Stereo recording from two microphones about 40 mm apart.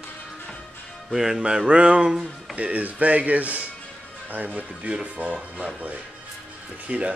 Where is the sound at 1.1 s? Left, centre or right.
Centre.